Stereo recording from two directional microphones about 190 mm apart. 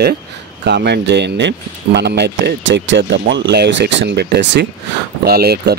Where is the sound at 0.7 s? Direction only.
65° right (ahead or behind).